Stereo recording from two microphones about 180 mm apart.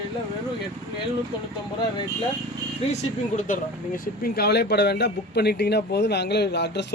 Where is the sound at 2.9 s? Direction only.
40° left (ahead or behind).